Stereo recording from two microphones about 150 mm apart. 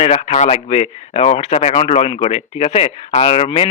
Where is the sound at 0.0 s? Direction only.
45° left (ahead or behind).